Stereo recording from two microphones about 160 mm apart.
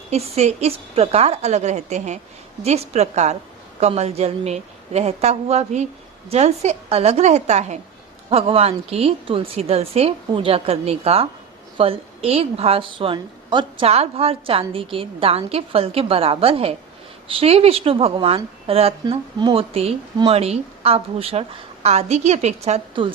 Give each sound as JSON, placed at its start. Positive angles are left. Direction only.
{"t": 0.1, "sound": "a woman's voice", "side_deg": -40}